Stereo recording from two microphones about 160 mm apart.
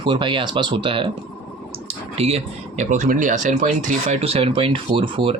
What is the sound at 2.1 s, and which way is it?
Speech, 40° right (ahead or behind).